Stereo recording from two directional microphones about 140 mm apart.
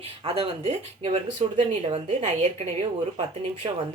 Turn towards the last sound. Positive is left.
turn(degrees=-45)  # may be behind; listen again after turning